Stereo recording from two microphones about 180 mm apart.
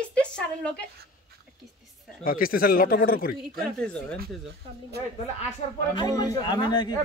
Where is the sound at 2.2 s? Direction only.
55° left (ahead or behind).